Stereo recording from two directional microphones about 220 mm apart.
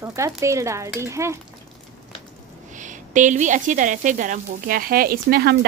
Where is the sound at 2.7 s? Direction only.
35° right (ahead or behind).